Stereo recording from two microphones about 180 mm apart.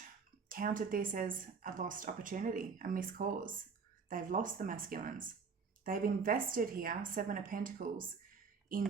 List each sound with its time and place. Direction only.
0.4 s speech: 50° right (ahead or behind)